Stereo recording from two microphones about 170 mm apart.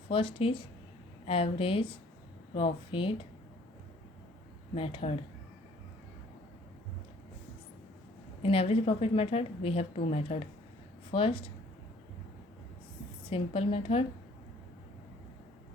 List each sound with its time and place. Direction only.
0.1 s a woman's voice: 35° left (ahead or behind)
4.7 s a woman's voice: 30° left (ahead or behind)
8.4 s a woman's voice: 35° left (ahead or behind)
13.3 s a woman's voice: 35° left (ahead or behind)